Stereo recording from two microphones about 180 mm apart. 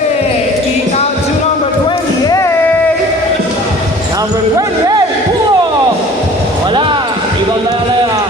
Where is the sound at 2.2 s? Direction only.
20° left (ahead or behind).